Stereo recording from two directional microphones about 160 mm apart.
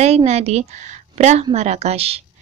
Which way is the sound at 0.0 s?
40° right (ahead or behind).